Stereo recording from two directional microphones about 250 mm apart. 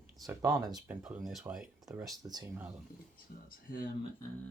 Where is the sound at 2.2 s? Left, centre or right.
Centre.